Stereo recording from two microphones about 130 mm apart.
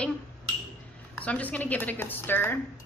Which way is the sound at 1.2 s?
10° left (ahead or behind).